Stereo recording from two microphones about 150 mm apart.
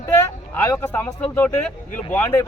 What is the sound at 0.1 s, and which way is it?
A man's voice, 20° left (ahead or behind).